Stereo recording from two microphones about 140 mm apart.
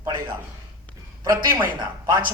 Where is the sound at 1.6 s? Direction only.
30° right (ahead or behind).